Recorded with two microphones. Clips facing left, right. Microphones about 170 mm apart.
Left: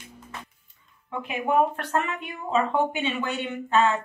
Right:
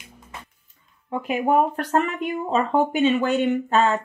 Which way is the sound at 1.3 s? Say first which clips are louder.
Right 3 dB; 40° right (ahead or behind).